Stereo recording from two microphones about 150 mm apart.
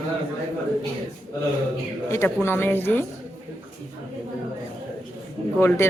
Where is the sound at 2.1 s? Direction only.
15° left (ahead or behind).